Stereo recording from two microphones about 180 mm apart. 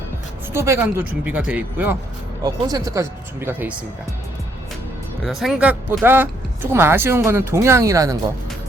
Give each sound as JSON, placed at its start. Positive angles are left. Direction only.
{"t": 0.5, "sound": "speech", "side_deg": -15}
{"t": 2.4, "sound": "speech", "side_deg": -20}
{"t": 5.2, "sound": "speech", "side_deg": 0}